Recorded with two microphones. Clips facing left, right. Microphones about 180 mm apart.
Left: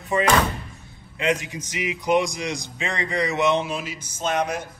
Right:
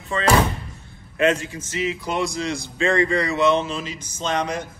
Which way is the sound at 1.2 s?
15° left (ahead or behind).